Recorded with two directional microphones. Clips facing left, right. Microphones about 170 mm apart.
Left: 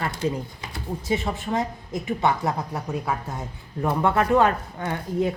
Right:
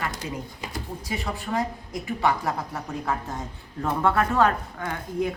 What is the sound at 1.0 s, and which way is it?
Speech, 25° left (ahead or behind).